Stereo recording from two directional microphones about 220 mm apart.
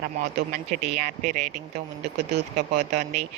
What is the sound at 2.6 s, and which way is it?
Speech, 30° right (ahead or behind).